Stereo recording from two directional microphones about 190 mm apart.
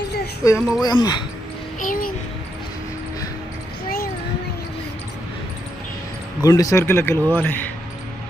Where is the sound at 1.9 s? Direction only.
50° left (ahead or behind).